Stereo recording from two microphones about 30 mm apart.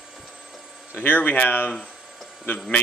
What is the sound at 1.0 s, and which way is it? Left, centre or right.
Speech, left.